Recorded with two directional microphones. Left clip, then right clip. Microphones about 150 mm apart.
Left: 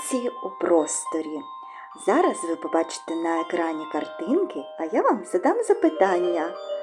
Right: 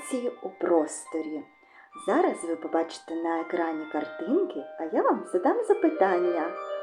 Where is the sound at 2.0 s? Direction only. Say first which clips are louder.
Left 4 dB; 35° left (ahead or behind).